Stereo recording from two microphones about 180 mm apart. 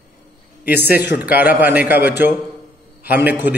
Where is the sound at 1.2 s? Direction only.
10° right (ahead or behind).